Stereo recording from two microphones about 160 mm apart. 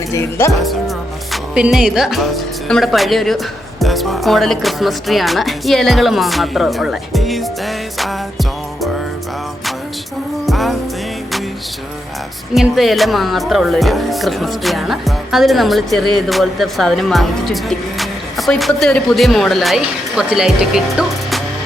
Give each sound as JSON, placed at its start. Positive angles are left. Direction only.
{"t": 0.1, "sound": "speech", "side_deg": 15}
{"t": 0.6, "sound": "speech", "side_deg": 0}
{"t": 10.4, "sound": "music", "side_deg": 0}
{"t": 12.5, "sound": "speech", "side_deg": 0}